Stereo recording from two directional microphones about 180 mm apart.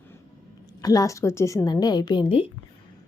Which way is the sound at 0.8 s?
20° left (ahead or behind).